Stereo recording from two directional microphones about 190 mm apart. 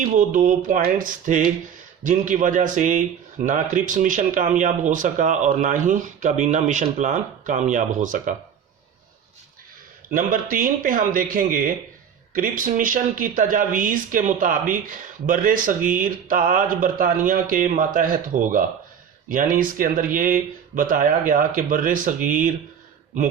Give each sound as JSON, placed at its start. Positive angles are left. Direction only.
{"t": 0.0, "sound": "speech", "side_deg": -40}
{"t": 10.1, "sound": "speech", "side_deg": -45}